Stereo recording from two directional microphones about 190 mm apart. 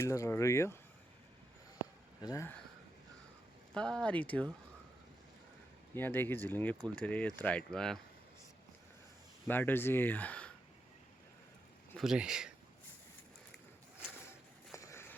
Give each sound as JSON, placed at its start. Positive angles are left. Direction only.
{"t": 0.0, "sound": "speech", "side_deg": 15}
{"t": 2.2, "sound": "speech", "side_deg": 15}
{"t": 3.8, "sound": "speech", "side_deg": 5}
{"t": 5.9, "sound": "speech", "side_deg": 10}
{"t": 9.5, "sound": "speech", "side_deg": 10}
{"t": 11.9, "sound": "speech", "side_deg": -5}
{"t": 14.8, "sound": "walk", "side_deg": 15}